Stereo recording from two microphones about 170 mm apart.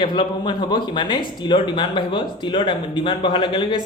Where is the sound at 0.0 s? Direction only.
30° left (ahead or behind).